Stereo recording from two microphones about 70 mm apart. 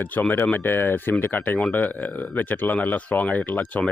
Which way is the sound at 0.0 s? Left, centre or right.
Left.